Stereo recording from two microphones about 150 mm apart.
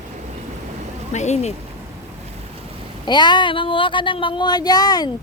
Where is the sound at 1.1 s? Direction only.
50° left (ahead or behind).